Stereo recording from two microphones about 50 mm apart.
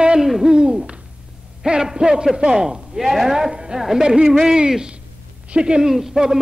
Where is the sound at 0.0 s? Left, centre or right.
Centre.